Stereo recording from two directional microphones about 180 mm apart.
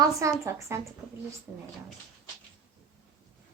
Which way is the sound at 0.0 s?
15° right (ahead or behind).